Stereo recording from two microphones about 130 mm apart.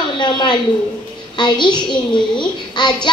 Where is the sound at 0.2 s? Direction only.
35° left (ahead or behind).